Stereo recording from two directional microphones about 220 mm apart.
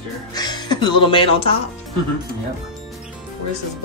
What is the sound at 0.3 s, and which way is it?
Speech, 20° left (ahead or behind).